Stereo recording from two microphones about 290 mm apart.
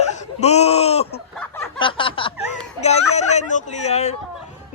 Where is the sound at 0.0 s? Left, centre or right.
Left.